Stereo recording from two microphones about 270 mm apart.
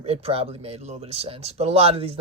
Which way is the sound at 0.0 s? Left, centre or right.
Right.